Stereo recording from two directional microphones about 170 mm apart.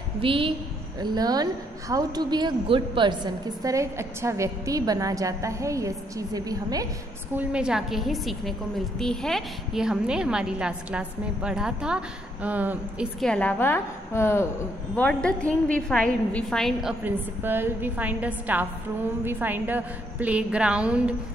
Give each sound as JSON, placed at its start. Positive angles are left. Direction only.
{"t": 0.2, "sound": "a woman's voice", "side_deg": -30}
{"t": 7.3, "sound": "a woman's voice", "side_deg": -5}
{"t": 13.2, "sound": "a woman's voice", "side_deg": 5}
{"t": 17.0, "sound": "a woman's voice", "side_deg": -10}